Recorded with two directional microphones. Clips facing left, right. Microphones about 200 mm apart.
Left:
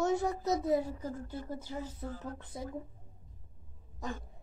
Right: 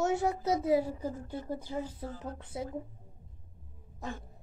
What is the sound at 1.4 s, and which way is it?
Speech, 25° right (ahead or behind).